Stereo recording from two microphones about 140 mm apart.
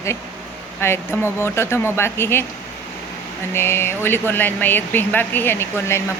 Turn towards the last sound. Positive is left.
turn(degrees=20)  # may be behind; listen again after turning